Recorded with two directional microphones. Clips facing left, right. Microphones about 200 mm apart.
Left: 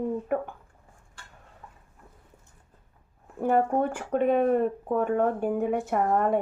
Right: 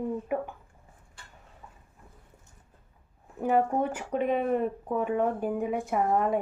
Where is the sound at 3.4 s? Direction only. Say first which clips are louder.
Left 1 dB; centre (ahead or behind).